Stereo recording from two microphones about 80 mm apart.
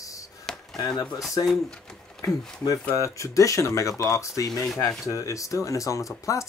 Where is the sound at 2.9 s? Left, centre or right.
Left.